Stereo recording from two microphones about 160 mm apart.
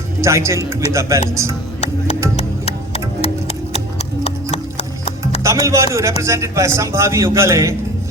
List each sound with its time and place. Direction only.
0.2 s a man's voice: 20° right (ahead or behind)
2.3 s music: 40° left (ahead or behind)
4.5 s horse: 40° left (ahead or behind)
5.4 s a man's voice: 20° right (ahead or behind)